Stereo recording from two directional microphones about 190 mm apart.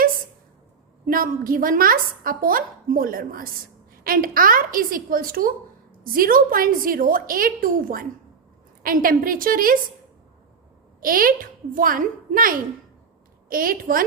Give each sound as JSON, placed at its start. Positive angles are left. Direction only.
{"t": 1.0, "sound": "a woman's voice", "side_deg": -50}
{"t": 11.0, "sound": "a woman's voice", "side_deg": -50}